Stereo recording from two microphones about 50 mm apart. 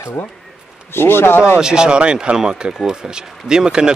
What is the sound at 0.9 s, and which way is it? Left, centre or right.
Speech, left.